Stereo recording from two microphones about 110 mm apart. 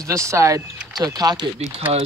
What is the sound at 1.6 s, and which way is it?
Speech, 65° right (ahead or behind).